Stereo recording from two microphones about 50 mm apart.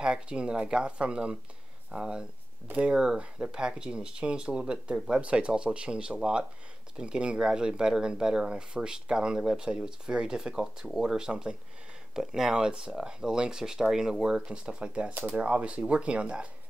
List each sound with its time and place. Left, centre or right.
0.0 s speech: centre